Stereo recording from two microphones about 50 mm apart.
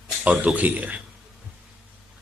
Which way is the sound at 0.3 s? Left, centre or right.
Right.